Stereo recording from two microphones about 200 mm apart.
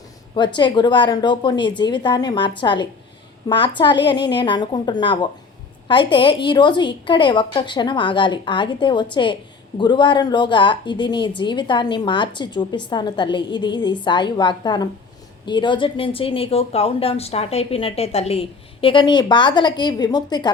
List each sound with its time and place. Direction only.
0.3 s a woman's voice: 20° left (ahead or behind)